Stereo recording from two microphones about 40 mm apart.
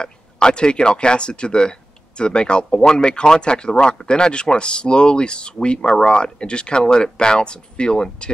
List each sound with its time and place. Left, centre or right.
0.0 s speech: left